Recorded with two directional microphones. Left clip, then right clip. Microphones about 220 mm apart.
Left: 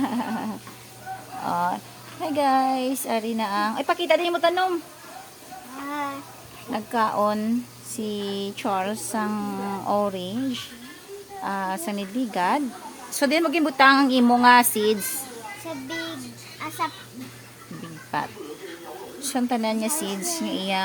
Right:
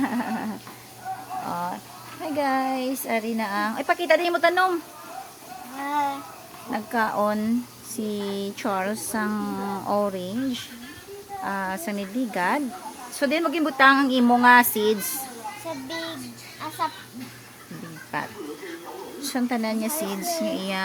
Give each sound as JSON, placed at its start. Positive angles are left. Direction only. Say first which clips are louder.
{"t": 0.0, "sound": "a sound", "louder": "even", "side_deg": 0}
{"t": 1.5, "sound": "a sound", "louder": "left 7 dB", "side_deg": 10}
{"t": 2.2, "sound": "speech", "louder": "left 3 dB", "side_deg": 5}
{"t": 6.7, "sound": "a woman's voice", "louder": "left 1 dB", "side_deg": 0}
{"t": 16.6, "sound": "speech", "louder": "even", "side_deg": 0}
{"t": 18.1, "sound": "speech", "louder": "left 2 dB", "side_deg": 5}